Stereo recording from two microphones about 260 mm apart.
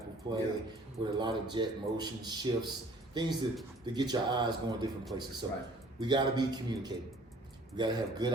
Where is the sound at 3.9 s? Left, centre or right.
Centre.